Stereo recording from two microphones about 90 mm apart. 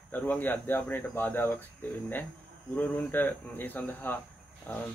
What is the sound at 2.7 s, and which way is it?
A man's voice, 20° left (ahead or behind).